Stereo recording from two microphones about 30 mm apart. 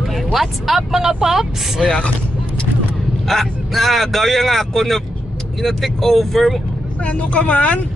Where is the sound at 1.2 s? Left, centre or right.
Centre.